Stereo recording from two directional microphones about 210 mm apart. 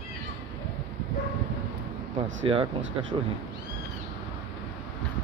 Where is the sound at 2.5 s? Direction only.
25° right (ahead or behind).